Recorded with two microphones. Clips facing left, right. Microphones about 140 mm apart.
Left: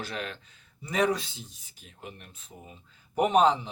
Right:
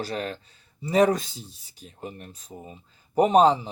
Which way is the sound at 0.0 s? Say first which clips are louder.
Right 6 dB; 40° right (ahead or behind).